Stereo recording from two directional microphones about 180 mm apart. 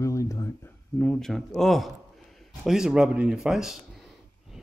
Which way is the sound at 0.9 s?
5° left (ahead or behind).